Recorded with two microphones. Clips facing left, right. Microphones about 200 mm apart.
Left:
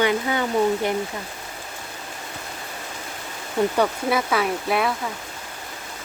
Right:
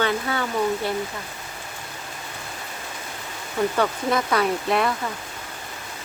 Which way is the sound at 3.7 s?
5° left (ahead or behind).